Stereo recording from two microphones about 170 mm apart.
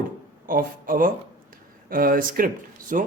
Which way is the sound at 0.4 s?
55° right (ahead or behind).